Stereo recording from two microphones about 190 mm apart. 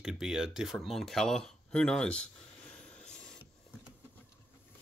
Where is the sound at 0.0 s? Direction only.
Centre (ahead or behind).